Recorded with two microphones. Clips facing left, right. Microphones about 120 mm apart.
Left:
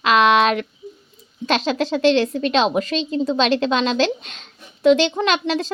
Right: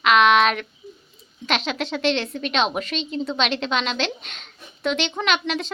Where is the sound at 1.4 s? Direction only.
40° left (ahead or behind).